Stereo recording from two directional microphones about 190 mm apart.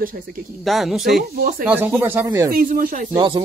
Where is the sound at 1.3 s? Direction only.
45° right (ahead or behind).